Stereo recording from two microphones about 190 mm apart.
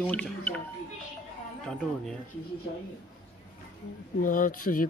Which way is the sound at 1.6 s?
5° left (ahead or behind).